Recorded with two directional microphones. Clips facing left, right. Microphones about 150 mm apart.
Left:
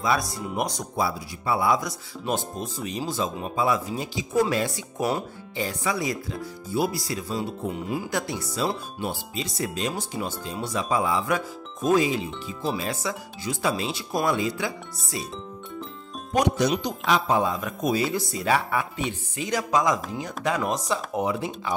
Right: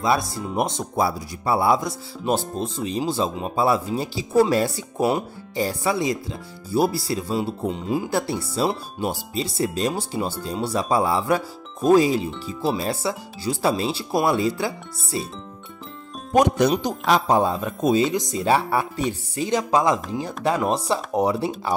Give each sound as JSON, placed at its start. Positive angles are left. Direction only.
{"t": 0.0, "sound": "speech", "side_deg": -25}
{"t": 0.9, "sound": "speech", "side_deg": -40}
{"t": 8.1, "sound": "speech", "side_deg": -30}
{"t": 16.3, "sound": "speech", "side_deg": -50}